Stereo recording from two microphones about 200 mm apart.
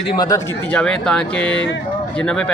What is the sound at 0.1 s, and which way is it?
Speech, 20° left (ahead or behind).